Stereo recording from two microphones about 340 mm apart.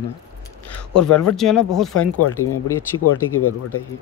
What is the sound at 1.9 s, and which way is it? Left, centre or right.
Speech, left.